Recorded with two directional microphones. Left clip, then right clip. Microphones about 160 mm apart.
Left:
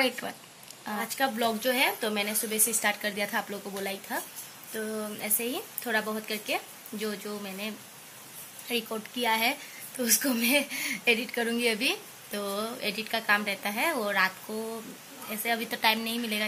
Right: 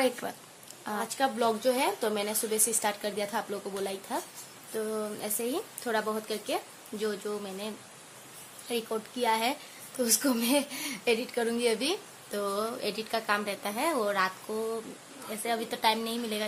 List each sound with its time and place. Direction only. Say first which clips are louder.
0.2 s speech: even; 15° right (ahead or behind)